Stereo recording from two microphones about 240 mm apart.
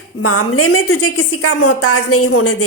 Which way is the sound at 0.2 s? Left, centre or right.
Left.